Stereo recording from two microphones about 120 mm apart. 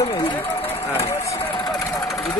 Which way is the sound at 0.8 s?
20° left (ahead or behind).